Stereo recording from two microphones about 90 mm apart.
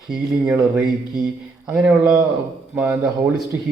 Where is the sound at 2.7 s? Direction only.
20° right (ahead or behind).